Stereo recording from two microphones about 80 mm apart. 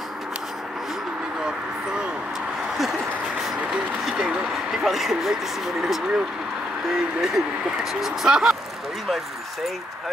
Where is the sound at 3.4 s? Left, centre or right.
Centre.